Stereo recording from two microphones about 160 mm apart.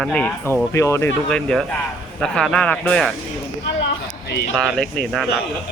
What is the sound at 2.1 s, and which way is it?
Speech, centre (ahead or behind).